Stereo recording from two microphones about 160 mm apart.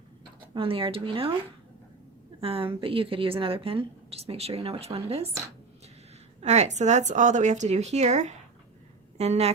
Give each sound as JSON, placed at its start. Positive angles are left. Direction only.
{"t": 0.5, "sound": "a woman's voice", "side_deg": -35}
{"t": 2.4, "sound": "a woman's voice", "side_deg": -35}
{"t": 6.4, "sound": "speech", "side_deg": -45}